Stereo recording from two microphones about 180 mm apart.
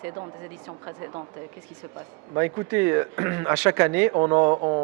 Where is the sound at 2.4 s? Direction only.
15° right (ahead or behind).